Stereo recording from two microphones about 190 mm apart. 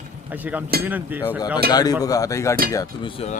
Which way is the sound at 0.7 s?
55° right (ahead or behind).